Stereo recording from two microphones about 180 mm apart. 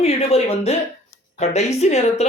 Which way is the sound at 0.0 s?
35° left (ahead or behind).